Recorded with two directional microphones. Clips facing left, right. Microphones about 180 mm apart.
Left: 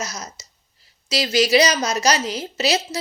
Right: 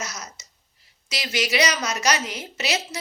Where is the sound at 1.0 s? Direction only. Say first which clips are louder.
Left 8 dB; 35° left (ahead or behind).